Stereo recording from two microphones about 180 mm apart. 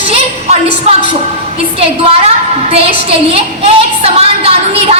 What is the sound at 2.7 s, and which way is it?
A woman's voice, 30° right (ahead or behind).